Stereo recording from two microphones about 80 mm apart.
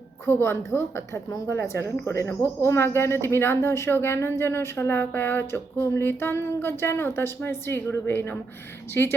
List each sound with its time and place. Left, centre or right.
0.3 s speech: left